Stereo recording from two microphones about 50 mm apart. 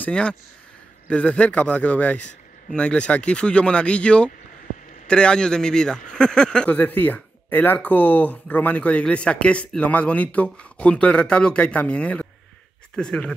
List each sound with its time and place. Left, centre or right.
0.1 s speech: left
2.7 s a man's voice: left
6.7 s speech: left
12.9 s a man's voice: centre